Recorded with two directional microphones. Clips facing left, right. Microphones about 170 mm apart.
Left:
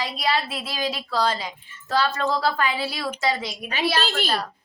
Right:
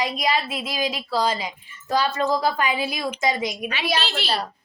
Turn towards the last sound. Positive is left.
turn(degrees=45)  # may be behind; listen again after turning